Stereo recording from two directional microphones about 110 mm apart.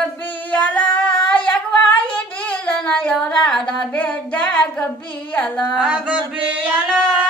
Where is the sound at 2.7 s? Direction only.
10° left (ahead or behind).